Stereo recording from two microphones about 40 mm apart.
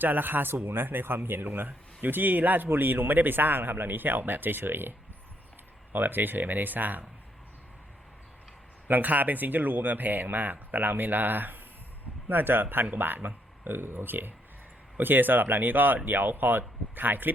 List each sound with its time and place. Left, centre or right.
0.0 s speech: right
1.6 s speech: right
8.9 s speech: right